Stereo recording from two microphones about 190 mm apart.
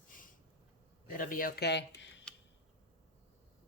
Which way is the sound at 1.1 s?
45° left (ahead or behind).